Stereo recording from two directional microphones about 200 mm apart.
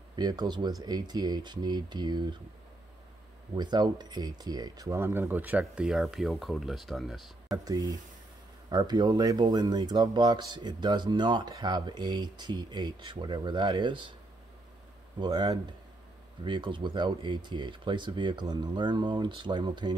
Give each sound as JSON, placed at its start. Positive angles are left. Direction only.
{"t": 0.1, "sound": "speech", "side_deg": -20}
{"t": 3.5, "sound": "speech", "side_deg": -20}
{"t": 7.5, "sound": "speech", "side_deg": -15}
{"t": 15.1, "sound": "speech", "side_deg": -20}